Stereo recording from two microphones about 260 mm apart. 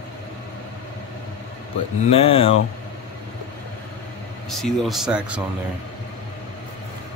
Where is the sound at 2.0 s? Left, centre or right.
Left.